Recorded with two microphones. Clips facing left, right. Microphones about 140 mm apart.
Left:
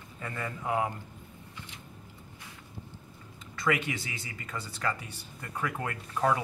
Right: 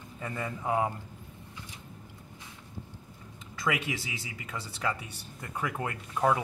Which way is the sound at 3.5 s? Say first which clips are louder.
Left 2 dB; 10° right (ahead or behind).